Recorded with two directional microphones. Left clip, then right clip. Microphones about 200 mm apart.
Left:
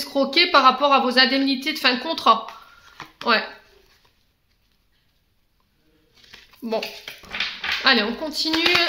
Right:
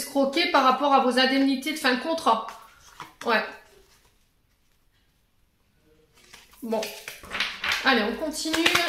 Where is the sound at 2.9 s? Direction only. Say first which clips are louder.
Left 4 dB; 30° left (ahead or behind).